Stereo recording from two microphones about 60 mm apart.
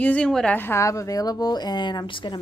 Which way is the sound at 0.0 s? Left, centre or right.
Left.